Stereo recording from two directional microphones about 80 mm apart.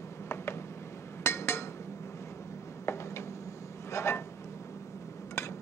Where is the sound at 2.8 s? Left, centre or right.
Left.